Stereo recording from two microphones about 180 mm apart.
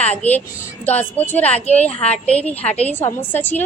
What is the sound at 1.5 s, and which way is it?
Speech, 35° left (ahead or behind).